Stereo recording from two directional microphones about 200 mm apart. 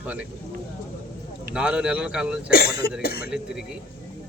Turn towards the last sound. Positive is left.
turn(degrees=-5)  # may be behind; listen again after turning